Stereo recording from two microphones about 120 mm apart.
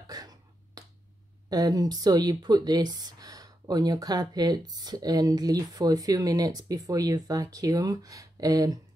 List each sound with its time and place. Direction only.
0.0 s finger snapping: 30° right (ahead or behind)
1.5 s speech: 30° right (ahead or behind)